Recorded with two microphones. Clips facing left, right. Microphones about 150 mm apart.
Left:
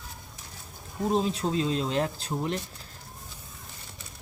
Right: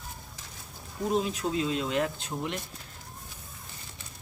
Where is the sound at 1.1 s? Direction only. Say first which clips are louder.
Left 2 dB; 30° left (ahead or behind).